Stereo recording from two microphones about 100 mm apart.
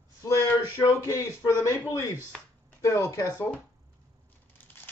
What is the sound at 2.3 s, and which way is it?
Speech, 10° left (ahead or behind).